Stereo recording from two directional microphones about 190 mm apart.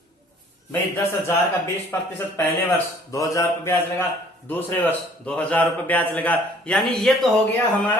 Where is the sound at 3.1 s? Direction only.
15° left (ahead or behind).